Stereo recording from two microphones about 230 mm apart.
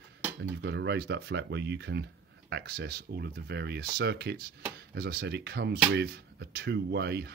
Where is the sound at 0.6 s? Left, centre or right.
Right.